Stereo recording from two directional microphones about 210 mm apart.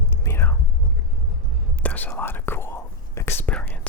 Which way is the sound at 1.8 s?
5° left (ahead or behind).